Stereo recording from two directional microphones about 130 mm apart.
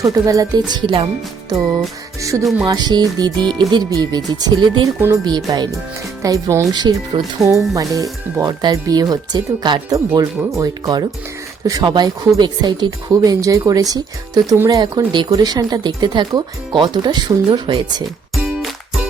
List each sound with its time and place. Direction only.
0.0 s speech: 25° right (ahead or behind)
2.4 s speech: centre (ahead or behind)
2.6 s speech: 30° right (ahead or behind)
4.9 s speech: 20° right (ahead or behind)
5.2 s speech: 35° right (ahead or behind)
18.3 s music: centre (ahead or behind)